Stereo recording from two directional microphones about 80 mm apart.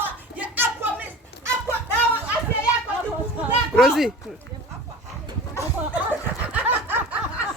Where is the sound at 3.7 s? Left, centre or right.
Centre.